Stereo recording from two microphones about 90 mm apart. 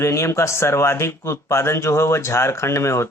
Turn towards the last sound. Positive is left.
turn(degrees=30)  # may be behind; listen again after turning